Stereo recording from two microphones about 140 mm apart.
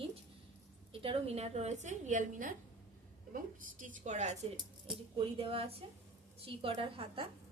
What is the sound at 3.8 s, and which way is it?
Speech, 65° right (ahead or behind).